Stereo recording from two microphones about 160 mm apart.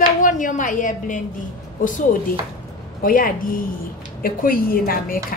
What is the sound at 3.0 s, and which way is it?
A woman's voice, 60° left (ahead or behind).